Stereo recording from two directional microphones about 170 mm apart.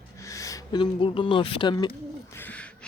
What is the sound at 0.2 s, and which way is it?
Speech, 20° left (ahead or behind).